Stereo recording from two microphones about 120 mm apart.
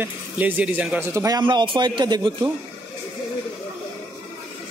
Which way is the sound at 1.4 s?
40° right (ahead or behind).